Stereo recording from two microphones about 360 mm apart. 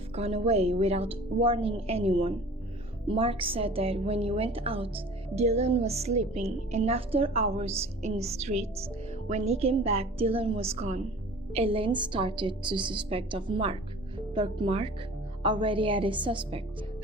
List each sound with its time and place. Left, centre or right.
0.2 s a woman's voice: centre